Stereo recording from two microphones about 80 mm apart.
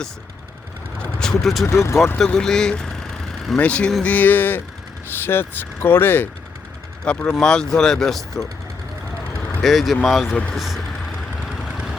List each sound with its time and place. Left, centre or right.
1.2 s speech: centre
1.6 s speech: left
2.1 s vehicle: centre
3.6 s speech: centre
7.0 s speech: centre
9.6 s speech: centre